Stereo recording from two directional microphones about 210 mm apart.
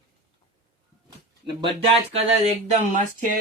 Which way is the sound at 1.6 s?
30° right (ahead or behind).